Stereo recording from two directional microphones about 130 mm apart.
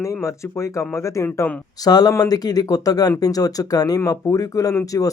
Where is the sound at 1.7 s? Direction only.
30° left (ahead or behind).